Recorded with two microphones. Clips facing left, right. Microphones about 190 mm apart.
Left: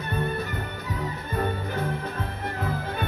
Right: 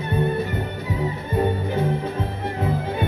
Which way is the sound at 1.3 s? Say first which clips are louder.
Right 6 dB; 25° right (ahead or behind).